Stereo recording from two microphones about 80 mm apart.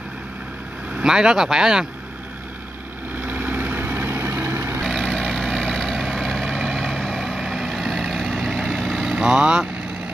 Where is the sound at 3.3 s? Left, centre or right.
Right.